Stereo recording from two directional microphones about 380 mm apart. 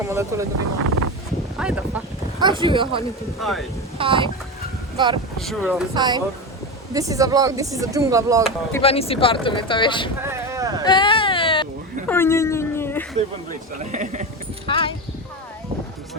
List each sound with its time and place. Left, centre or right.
0.0 s speech: centre
0.6 s a sound: right
1.5 s speech: centre
3.4 s speech: centre
3.9 s speech: centre
5.4 s speech: centre
5.9 s speech: centre
8.4 s speech: centre
10.2 s vehicle: centre
10.8 s baby cry: centre
12.0 s a sound: centre
13.7 s speech: centre
14.7 s speech: centre